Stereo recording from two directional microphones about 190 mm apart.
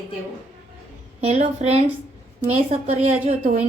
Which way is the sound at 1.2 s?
35° right (ahead or behind).